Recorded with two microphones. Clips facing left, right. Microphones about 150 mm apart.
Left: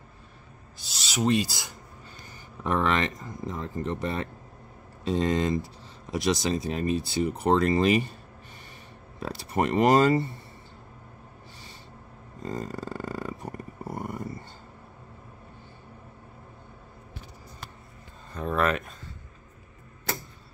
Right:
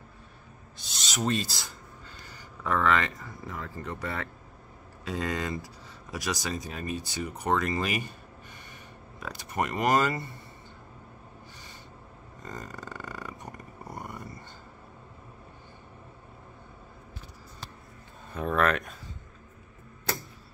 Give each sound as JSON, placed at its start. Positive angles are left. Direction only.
{"t": 0.8, "sound": "filing", "side_deg": 5}
{"t": 2.6, "sound": "speech", "side_deg": 25}
{"t": 9.2, "sound": "speech", "side_deg": 30}
{"t": 12.4, "sound": "burping", "side_deg": 30}
{"t": 13.5, "sound": "dog", "side_deg": 30}
{"t": 18.5, "sound": "speech", "side_deg": 5}